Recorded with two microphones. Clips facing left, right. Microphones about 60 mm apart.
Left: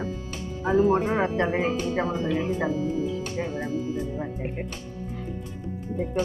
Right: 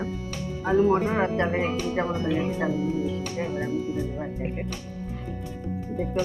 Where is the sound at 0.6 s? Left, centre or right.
Left.